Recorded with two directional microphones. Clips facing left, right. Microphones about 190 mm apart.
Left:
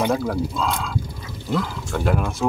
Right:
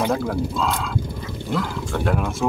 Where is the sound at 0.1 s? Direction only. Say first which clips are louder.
Even; centre (ahead or behind).